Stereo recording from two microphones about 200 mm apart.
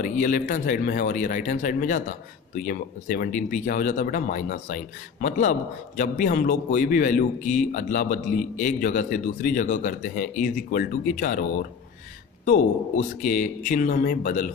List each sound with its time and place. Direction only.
0.0 s speech: 40° left (ahead or behind)